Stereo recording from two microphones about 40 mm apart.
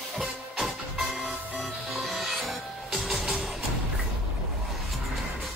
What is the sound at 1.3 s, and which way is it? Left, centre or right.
Music, centre.